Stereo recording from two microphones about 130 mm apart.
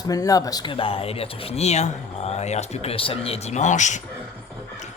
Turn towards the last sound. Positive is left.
turn(degrees=70)  # may be behind; listen again after turning